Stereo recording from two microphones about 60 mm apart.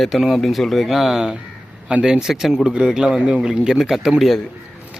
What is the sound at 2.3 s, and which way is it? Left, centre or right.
Speech, centre.